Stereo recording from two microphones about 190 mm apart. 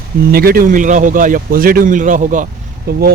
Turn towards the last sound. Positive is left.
turn(degrees=-55)  # may be behind; listen again after turning